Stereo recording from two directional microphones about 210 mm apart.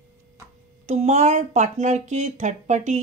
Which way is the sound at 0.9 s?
30° right (ahead or behind).